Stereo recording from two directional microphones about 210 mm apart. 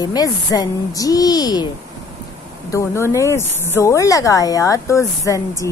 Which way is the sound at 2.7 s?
15° left (ahead or behind).